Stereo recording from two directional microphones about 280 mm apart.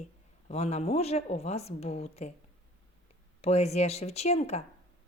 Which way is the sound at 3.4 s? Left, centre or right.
Left.